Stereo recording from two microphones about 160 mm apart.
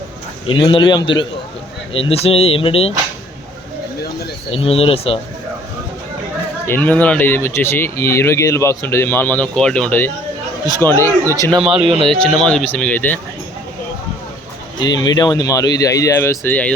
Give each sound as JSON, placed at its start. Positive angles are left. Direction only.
{"t": 0.4, "sound": "speech", "side_deg": 30}
{"t": 4.5, "sound": "speech", "side_deg": 35}
{"t": 6.7, "sound": "speech", "side_deg": 10}
{"t": 11.7, "sound": "speech", "side_deg": -35}
{"t": 12.0, "sound": "speech", "side_deg": 5}
{"t": 14.8, "sound": "speech", "side_deg": 25}